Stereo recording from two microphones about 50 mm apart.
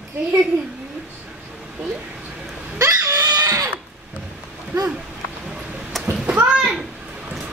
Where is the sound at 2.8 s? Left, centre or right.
Right.